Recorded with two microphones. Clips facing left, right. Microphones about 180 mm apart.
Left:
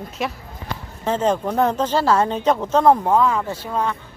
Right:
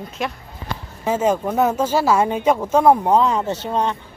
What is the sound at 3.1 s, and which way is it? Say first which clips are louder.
Speech: right 1 dB; 20° right (ahead or behind).